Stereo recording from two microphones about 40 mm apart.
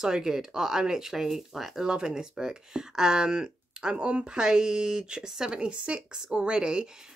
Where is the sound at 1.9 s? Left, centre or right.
Centre.